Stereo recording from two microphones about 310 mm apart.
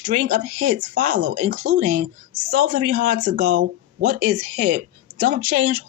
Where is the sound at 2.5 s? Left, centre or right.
Right.